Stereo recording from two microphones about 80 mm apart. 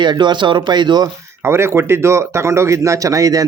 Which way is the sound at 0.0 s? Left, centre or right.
Right.